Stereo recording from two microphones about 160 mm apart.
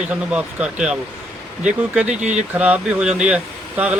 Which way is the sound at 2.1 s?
45° right (ahead or behind).